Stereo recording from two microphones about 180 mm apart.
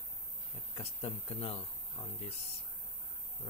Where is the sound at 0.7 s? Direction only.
35° left (ahead or behind).